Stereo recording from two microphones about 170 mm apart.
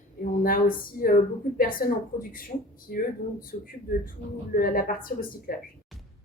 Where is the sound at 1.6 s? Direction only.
55° left (ahead or behind).